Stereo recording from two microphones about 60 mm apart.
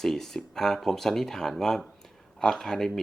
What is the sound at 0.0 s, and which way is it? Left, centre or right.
Speech, centre.